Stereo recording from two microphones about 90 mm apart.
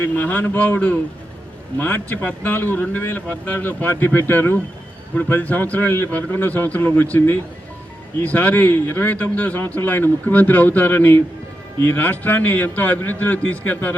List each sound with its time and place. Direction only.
0.0 s a man's voice: 20° left (ahead or behind)